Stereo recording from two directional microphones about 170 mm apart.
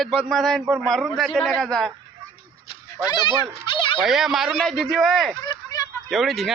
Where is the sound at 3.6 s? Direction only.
30° left (ahead or behind).